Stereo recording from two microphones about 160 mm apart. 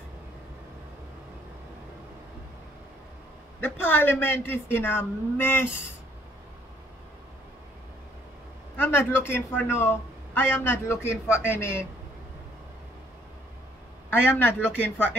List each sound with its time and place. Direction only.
3.6 s speech: 15° left (ahead or behind)
8.7 s speech: 15° left (ahead or behind)
14.3 s speech: 15° left (ahead or behind)